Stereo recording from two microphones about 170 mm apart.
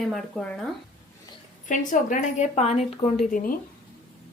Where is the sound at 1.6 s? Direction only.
50° left (ahead or behind).